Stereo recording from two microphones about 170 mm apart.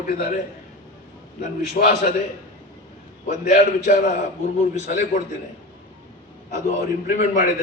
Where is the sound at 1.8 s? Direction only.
50° left (ahead or behind).